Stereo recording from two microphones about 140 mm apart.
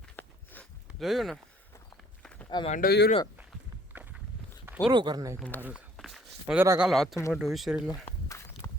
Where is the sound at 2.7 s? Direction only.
90° left.